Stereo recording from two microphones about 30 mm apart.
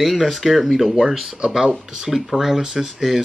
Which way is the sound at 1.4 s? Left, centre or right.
Centre.